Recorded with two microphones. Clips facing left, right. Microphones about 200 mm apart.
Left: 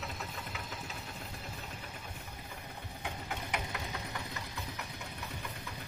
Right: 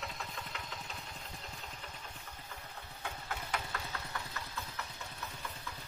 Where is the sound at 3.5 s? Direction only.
15° left (ahead or behind).